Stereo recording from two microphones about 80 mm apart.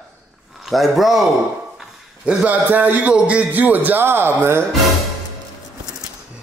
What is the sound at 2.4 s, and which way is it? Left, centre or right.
Speech, right.